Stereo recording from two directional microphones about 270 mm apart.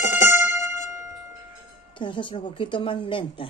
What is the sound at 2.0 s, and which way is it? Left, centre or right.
Speech, centre.